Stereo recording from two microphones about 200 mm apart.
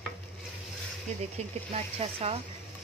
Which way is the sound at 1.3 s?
30° right (ahead or behind).